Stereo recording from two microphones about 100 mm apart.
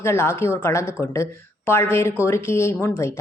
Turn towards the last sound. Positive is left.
turn(degrees=25)  # may be behind; listen again after turning